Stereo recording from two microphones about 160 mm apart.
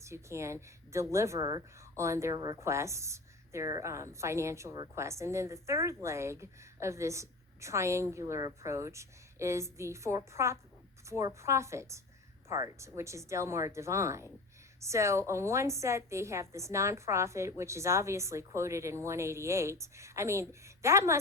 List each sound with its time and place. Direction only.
0.0 s a woman's voice: 20° right (ahead or behind)